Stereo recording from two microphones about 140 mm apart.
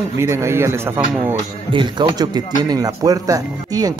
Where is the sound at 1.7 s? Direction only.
35° right (ahead or behind).